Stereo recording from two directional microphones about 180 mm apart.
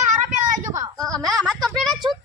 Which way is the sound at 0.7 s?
20° right (ahead or behind).